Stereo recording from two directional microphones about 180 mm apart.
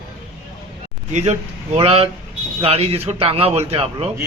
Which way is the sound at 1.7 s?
30° right (ahead or behind).